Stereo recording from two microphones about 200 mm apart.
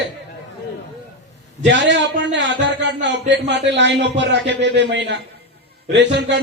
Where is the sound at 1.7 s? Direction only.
60° right (ahead or behind).